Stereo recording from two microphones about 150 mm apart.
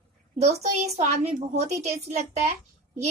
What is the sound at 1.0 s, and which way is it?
A child's voice, 50° right (ahead or behind).